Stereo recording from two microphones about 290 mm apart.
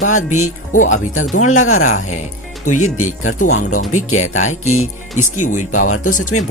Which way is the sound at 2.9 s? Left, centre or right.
Left.